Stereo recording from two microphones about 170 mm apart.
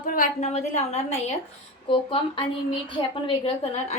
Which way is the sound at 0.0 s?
50° left (ahead or behind).